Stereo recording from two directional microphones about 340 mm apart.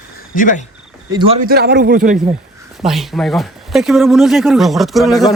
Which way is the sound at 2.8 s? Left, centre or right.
Centre.